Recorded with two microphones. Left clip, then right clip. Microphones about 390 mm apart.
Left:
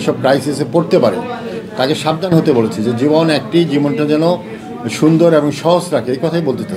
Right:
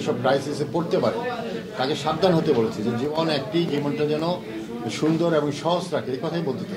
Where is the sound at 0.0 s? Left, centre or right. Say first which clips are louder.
Left 9 dB; left.